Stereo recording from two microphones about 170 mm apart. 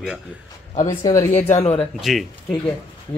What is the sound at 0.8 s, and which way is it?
Speech, 20° left (ahead or behind).